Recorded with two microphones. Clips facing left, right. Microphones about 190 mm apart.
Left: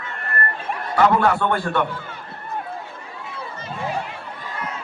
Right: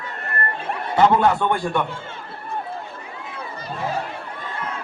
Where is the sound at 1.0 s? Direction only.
20° right (ahead or behind).